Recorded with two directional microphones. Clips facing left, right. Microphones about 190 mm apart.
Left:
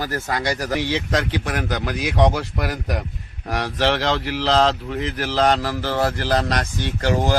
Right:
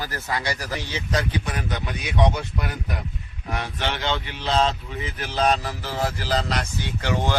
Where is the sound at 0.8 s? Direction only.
75° left (ahead or behind).